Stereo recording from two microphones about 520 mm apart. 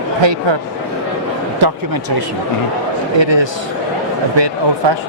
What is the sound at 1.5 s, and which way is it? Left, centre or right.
Speech, right.